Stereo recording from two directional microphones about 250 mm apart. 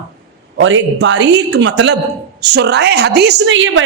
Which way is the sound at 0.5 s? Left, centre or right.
Right.